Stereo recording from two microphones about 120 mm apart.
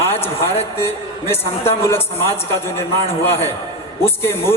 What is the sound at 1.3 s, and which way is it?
A man's voice, 20° left (ahead or behind).